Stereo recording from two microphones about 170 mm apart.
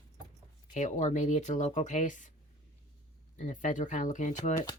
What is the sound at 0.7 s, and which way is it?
Speech, 45° left (ahead or behind).